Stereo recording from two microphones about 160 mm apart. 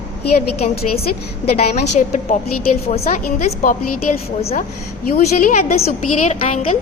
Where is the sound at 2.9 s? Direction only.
40° left (ahead or behind).